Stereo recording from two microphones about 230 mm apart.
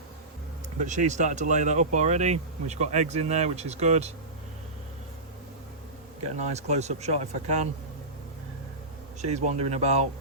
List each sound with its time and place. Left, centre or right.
0.8 s speech: right
6.4 s speech: right
9.2 s speech: right